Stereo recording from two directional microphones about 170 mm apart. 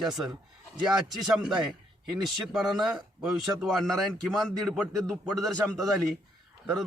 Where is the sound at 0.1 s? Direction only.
Centre (ahead or behind).